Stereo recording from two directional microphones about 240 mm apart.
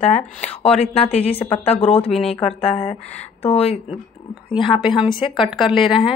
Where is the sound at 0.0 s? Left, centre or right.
Left.